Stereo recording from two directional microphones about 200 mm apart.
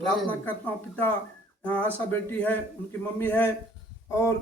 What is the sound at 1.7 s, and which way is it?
Speech, 10° left (ahead or behind).